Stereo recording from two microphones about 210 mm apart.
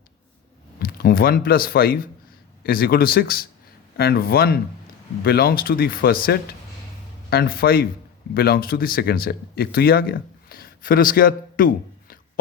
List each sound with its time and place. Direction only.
0.8 s speech: 45° left (ahead or behind)
7.3 s speech: 45° left (ahead or behind)